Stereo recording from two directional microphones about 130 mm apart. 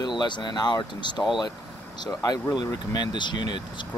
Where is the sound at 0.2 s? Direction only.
35° left (ahead or behind).